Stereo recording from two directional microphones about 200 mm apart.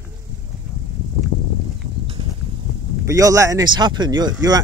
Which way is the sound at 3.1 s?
15° right (ahead or behind).